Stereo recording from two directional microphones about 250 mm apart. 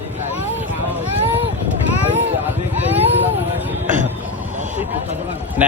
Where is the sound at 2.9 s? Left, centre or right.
Centre.